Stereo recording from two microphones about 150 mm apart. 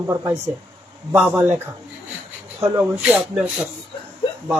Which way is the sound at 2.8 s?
5° right (ahead or behind).